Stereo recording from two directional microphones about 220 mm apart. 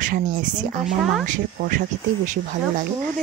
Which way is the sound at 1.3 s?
40° right (ahead or behind).